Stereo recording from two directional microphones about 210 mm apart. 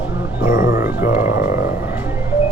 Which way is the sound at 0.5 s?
45° left (ahead or behind).